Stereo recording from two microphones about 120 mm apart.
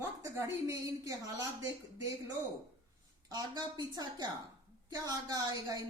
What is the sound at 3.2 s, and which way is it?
A woman's voice, 35° right (ahead or behind).